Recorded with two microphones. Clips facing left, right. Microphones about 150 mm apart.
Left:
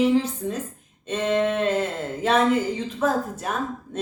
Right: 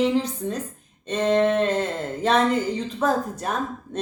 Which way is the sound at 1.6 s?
5° left (ahead or behind).